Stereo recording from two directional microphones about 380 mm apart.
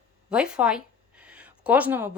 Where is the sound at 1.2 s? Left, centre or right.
Centre.